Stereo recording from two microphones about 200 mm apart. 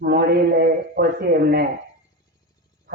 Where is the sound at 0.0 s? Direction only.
50° right (ahead or behind).